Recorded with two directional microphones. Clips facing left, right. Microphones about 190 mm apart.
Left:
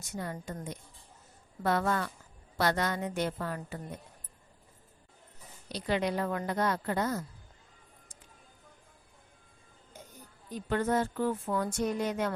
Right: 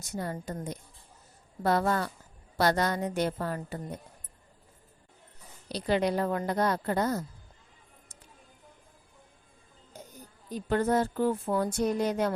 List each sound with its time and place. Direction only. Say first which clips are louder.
0.1 s speech: right 3 dB; 35° right (ahead or behind)
5.6 s speech: right 4 dB; 35° right (ahead or behind)
10.0 s music: right 4 dB; 35° right (ahead or behind)
10.5 s speech: right 3 dB; 35° right (ahead or behind)